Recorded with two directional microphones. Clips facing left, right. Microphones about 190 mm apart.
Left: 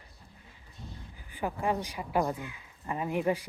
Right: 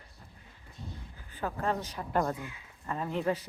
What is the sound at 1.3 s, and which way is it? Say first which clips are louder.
Speech: left 1 dB; 15° left (ahead or behind).